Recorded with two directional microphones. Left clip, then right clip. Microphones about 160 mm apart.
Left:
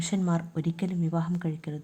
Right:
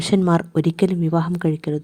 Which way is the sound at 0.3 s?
55° right (ahead or behind).